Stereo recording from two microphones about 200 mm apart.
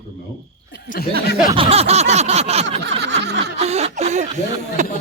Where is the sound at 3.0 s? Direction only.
60° right (ahead or behind).